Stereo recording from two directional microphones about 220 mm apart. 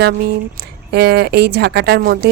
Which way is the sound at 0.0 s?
50° right (ahead or behind).